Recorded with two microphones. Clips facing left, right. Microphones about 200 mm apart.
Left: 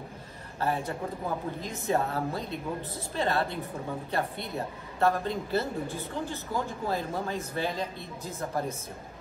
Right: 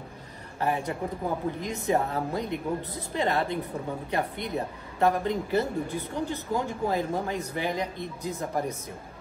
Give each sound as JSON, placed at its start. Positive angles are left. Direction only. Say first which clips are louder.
{"t": 0.6, "sound": "speech", "louder": "right 2 dB", "side_deg": -15}